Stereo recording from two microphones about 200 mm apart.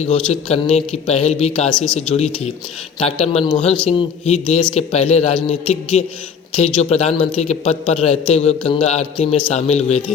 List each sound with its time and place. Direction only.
0.0 s a man's voice: 35° left (ahead or behind)